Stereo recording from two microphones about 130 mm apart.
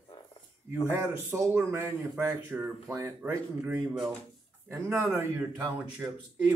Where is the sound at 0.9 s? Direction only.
20° right (ahead or behind).